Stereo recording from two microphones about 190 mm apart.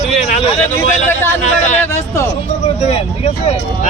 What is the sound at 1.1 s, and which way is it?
A man's voice, 10° left (ahead or behind).